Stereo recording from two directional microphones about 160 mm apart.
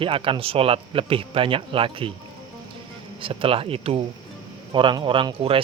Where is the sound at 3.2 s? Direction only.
35° right (ahead or behind).